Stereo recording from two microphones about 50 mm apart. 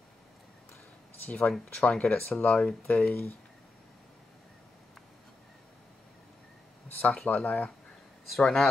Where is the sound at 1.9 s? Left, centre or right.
Left.